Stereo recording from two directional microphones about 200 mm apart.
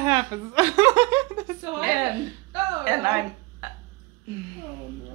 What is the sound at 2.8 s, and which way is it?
Speech, 10° right (ahead or behind).